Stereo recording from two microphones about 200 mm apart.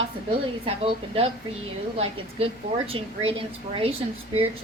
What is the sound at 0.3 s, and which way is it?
A woman's voice, 25° right (ahead or behind).